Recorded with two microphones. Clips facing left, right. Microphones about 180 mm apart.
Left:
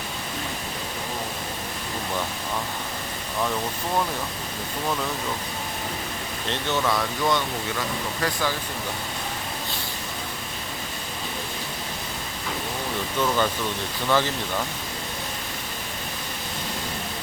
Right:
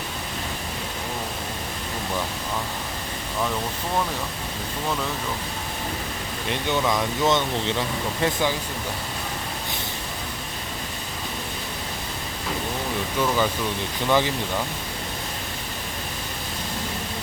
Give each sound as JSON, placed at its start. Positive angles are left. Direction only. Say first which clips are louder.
{"t": 6.5, "sound": "speech", "louder": "right 1 dB", "side_deg": -15}
{"t": 13.1, "sound": "speech", "louder": "even", "side_deg": -5}